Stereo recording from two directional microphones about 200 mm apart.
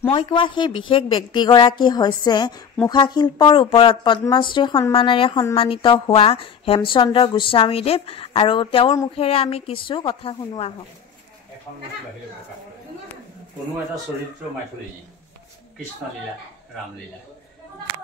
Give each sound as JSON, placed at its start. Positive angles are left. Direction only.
{"t": 0.1, "sound": "a woman's voice", "side_deg": 25}